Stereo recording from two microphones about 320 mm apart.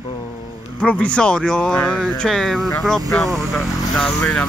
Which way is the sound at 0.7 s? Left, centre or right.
Centre.